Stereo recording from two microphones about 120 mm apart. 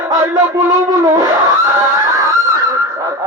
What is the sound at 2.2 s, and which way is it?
Goose, 25° right (ahead or behind).